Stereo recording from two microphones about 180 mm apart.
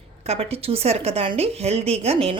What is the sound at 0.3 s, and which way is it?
A woman's voice, 35° right (ahead or behind).